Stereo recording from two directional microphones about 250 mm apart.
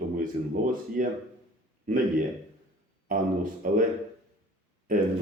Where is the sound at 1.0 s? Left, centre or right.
Right.